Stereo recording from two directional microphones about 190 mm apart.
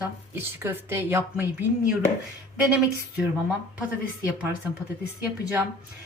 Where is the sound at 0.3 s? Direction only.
10° right (ahead or behind).